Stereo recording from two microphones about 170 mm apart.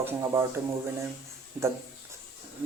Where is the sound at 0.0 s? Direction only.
15° right (ahead or behind).